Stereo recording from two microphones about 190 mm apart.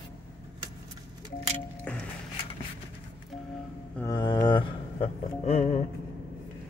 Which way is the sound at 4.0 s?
20° left (ahead or behind).